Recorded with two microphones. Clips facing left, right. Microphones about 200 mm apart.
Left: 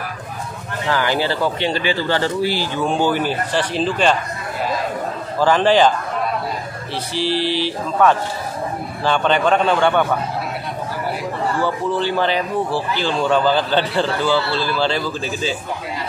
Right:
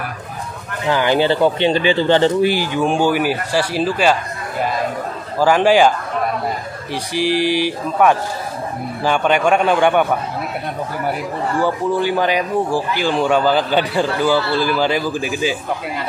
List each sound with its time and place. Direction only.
0.8 s speech: 20° right (ahead or behind)
5.4 s speech: 10° right (ahead or behind)
7.2 s speech: 15° right (ahead or behind)
11.6 s speech: 15° right (ahead or behind)